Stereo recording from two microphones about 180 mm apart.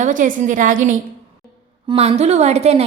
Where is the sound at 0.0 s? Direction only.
45° right (ahead or behind).